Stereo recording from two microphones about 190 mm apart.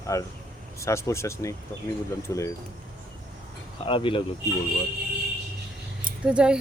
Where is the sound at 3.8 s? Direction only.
25° left (ahead or behind).